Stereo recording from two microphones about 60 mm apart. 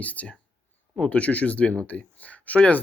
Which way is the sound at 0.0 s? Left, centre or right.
Left.